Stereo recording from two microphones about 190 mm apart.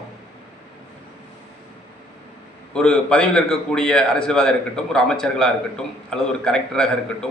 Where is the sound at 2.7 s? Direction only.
5° left (ahead or behind).